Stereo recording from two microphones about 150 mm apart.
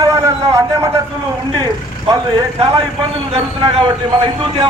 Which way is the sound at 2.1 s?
20° right (ahead or behind).